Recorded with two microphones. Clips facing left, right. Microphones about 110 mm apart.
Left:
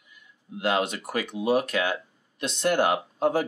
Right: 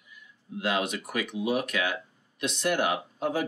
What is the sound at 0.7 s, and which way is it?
Speech, 35° left (ahead or behind).